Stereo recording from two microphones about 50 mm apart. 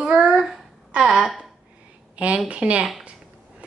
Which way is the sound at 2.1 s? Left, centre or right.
Right.